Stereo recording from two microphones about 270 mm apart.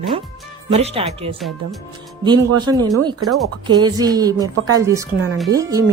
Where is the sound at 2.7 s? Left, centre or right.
Centre.